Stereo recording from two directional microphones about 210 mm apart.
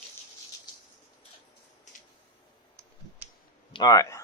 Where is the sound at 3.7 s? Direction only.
15° left (ahead or behind).